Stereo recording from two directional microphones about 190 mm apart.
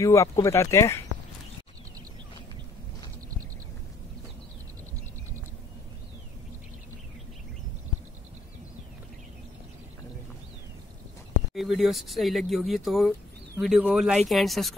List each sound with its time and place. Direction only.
0.0 s speech: 15° left (ahead or behind)
11.5 s speech: centre (ahead or behind)